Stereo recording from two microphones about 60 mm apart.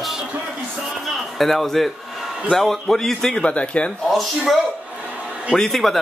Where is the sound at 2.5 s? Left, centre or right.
Centre.